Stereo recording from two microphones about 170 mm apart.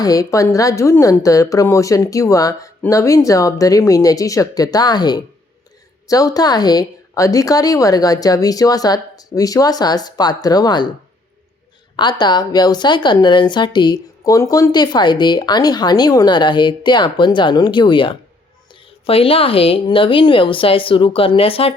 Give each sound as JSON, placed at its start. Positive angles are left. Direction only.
{"t": 0.0, "sound": "speech", "side_deg": 20}
{"t": 11.9, "sound": "a woman's voice", "side_deg": 25}